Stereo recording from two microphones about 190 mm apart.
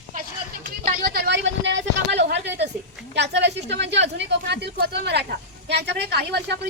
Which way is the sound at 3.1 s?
65° right (ahead or behind).